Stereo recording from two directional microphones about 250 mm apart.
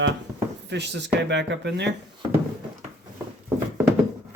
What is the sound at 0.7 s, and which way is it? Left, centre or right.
Speech, right.